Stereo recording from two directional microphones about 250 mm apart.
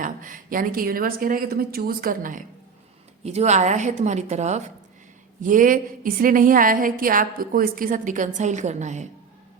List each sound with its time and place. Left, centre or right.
0.0 s a woman's voice: right